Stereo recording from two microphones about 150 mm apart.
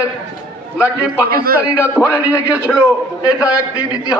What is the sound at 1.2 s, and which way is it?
Speech, 85° right.